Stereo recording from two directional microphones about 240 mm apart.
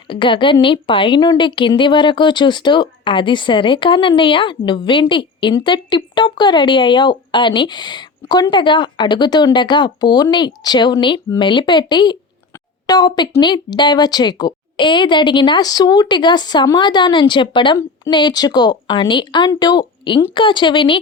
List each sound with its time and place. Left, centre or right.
0.1 s a woman's voice: left